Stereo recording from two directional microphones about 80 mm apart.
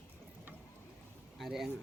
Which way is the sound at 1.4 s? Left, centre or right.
Centre.